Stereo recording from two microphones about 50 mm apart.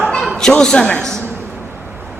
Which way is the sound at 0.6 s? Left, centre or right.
Centre.